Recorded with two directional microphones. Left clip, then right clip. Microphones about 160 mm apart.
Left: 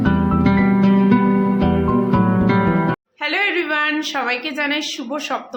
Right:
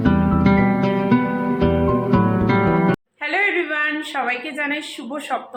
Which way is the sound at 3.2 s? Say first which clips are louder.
Left 1 dB; 20° left (ahead or behind).